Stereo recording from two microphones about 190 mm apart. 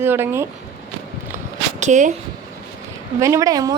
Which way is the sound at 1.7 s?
40° right (ahead or behind).